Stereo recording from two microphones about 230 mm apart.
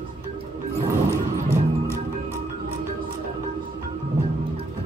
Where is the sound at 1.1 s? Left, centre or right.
Centre.